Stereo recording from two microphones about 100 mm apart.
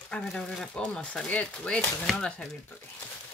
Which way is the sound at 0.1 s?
5° left (ahead or behind).